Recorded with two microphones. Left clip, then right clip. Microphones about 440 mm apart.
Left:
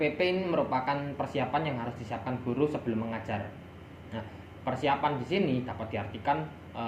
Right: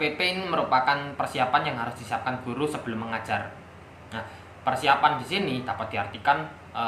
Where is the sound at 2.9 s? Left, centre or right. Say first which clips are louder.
Even; right.